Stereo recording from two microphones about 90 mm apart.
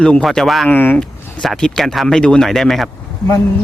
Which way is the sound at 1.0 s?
5° left (ahead or behind).